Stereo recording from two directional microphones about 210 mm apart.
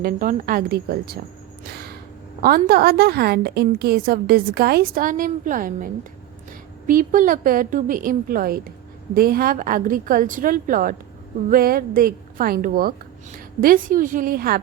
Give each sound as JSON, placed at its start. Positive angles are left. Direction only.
{"t": 0.0, "sound": "a woman's voice", "side_deg": -40}
{"t": 1.7, "sound": "a sound", "side_deg": -50}
{"t": 2.6, "sound": "a woman's voice", "side_deg": -45}